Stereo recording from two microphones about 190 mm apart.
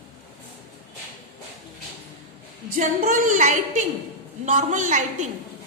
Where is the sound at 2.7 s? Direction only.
40° right (ahead or behind).